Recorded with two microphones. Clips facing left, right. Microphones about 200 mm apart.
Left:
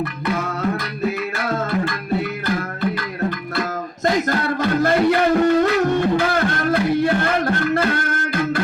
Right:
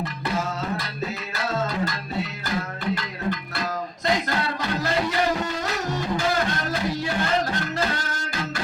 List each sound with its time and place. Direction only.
0.0 s music: 60° left (ahead or behind)
2.8 s music: 55° left (ahead or behind)